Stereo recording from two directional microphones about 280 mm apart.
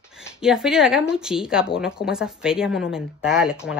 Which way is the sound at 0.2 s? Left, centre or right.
Centre.